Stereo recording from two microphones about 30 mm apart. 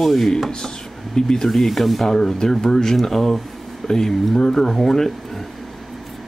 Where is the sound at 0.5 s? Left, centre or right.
Left.